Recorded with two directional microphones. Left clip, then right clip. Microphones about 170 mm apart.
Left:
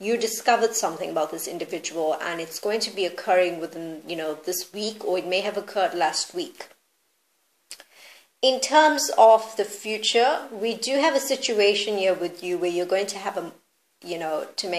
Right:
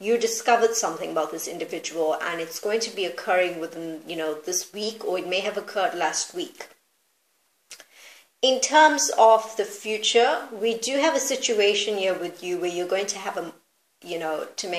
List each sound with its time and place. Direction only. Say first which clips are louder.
0.4 s a woman's voice: left 1 dB; 35° left (ahead or behind)
8.4 s a woman's voice: right 1 dB; 30° left (ahead or behind)